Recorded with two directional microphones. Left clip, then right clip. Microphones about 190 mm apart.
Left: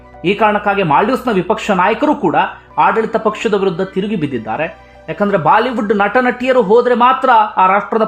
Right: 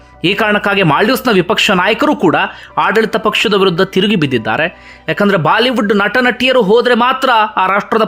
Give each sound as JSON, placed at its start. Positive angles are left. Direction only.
{"t": 0.2, "sound": "speech", "side_deg": -20}